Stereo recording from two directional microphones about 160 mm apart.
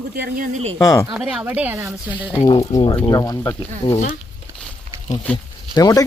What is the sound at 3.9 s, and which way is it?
Speech, 45° left (ahead or behind).